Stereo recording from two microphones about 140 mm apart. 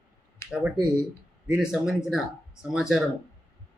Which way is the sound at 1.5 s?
5° right (ahead or behind).